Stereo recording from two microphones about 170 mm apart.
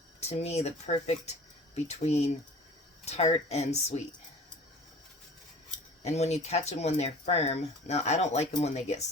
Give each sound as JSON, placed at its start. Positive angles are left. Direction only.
{"t": 0.2, "sound": "speech", "side_deg": 40}
{"t": 6.0, "sound": "speech", "side_deg": 40}